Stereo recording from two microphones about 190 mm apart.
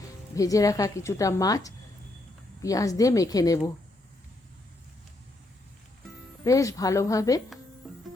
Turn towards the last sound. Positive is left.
turn(degrees=0)  # may be behind; listen again after turning